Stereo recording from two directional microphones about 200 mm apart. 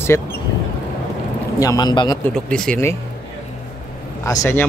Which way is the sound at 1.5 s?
20° left (ahead or behind).